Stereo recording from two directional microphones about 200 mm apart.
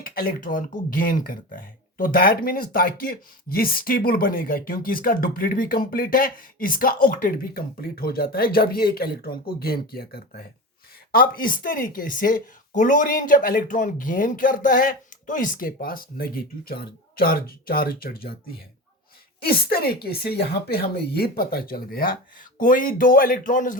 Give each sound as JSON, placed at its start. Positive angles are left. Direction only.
{"t": 0.0, "sound": "speech", "side_deg": 45}
{"t": 19.4, "sound": "speech", "side_deg": 50}